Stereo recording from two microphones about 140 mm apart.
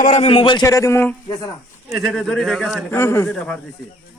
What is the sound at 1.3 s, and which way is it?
Speech, 30° left (ahead or behind).